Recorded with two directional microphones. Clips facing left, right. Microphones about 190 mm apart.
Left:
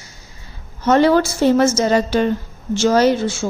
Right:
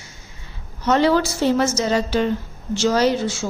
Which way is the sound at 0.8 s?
50° left (ahead or behind).